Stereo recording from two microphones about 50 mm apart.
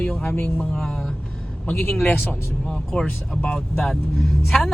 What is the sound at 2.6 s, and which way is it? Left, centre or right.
Speech, centre.